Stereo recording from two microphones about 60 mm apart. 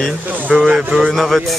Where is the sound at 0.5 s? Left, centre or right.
Centre.